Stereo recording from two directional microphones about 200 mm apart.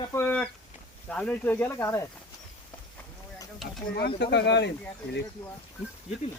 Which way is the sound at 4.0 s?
55° left (ahead or behind).